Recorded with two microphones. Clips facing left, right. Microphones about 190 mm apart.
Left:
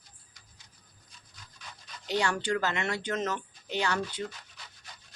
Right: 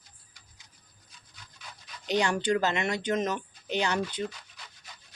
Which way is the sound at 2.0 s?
20° right (ahead or behind).